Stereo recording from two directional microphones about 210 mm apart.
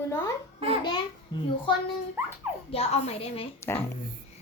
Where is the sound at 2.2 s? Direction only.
10° right (ahead or behind).